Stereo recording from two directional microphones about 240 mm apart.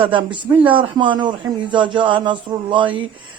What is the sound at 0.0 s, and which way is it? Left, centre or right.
Speech, right.